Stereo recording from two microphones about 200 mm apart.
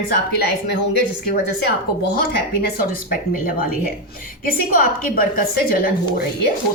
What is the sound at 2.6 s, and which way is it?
A woman's voice, 45° left (ahead or behind).